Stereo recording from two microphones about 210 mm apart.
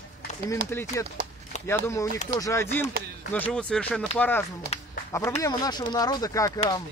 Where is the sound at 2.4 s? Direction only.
10° left (ahead or behind).